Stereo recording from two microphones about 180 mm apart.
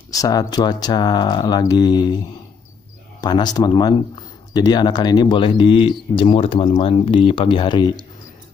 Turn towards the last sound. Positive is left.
turn(degrees=25)  # may be behind; listen again after turning